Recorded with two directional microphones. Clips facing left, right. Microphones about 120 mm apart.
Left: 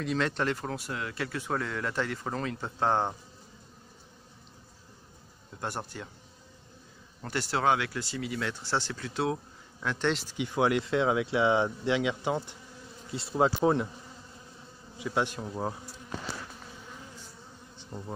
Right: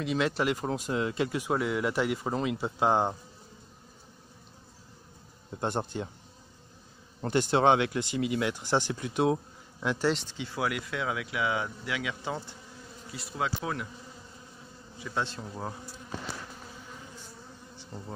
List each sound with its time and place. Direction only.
0.0 s speech: 5° right (ahead or behind)
5.6 s speech: 20° right (ahead or behind)
7.2 s speech: 20° right (ahead or behind)
10.3 s speech: 20° left (ahead or behind)
13.1 s speech: 30° left (ahead or behind)
15.0 s bee: 15° left (ahead or behind)
17.7 s bee: 15° left (ahead or behind)